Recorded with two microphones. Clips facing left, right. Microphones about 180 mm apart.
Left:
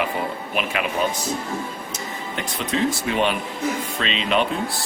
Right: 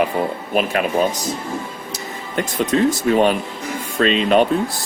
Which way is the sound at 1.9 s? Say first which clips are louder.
Right 9 dB; 45° right (ahead or behind).